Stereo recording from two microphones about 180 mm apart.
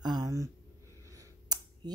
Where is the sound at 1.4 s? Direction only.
20° right (ahead or behind).